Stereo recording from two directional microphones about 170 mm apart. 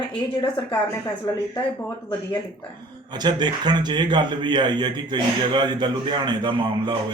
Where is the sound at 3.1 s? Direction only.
25° right (ahead or behind).